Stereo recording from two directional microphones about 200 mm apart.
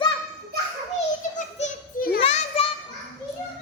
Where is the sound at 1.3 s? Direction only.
40° left (ahead or behind).